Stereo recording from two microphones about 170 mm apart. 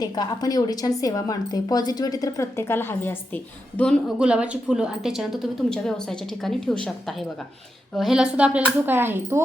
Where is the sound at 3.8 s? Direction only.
Centre (ahead or behind).